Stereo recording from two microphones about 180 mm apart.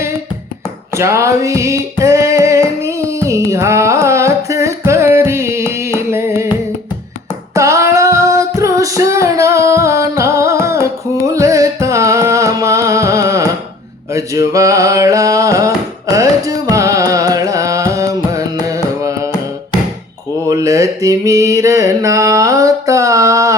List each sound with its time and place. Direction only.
0.9 s music: 15° right (ahead or behind)
7.5 s female singing: 15° right (ahead or behind)
11.3 s music: 20° right (ahead or behind)
14.1 s mantra: 15° right (ahead or behind)
16.1 s carnatic music: 20° right (ahead or behind)
20.5 s mantra: 20° right (ahead or behind)